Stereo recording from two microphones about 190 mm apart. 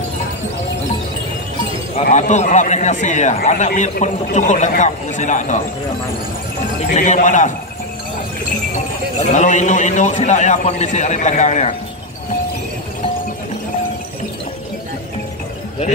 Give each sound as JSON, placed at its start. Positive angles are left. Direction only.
{"t": 2.0, "sound": "a man's voice", "side_deg": 40}
{"t": 6.8, "sound": "a man's voice", "side_deg": 40}
{"t": 9.3, "sound": "a man's voice", "side_deg": 40}